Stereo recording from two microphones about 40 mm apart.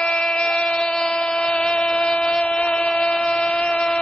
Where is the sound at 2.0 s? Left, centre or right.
Centre.